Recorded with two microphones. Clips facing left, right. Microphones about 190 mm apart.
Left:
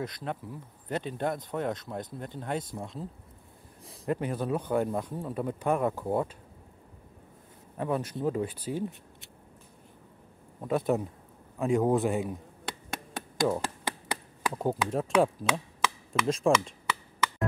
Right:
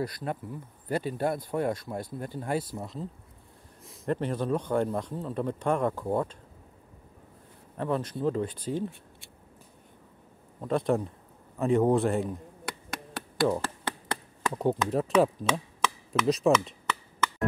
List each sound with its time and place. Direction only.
0.0 s speech: 5° right (ahead or behind)
4.1 s speech: 5° left (ahead or behind)
7.7 s speech: 10° left (ahead or behind)
10.6 s speech: 5° left (ahead or behind)
12.6 s chop: 25° left (ahead or behind)
13.5 s a sound: 10° left (ahead or behind)
14.5 s speech: centre (ahead or behind)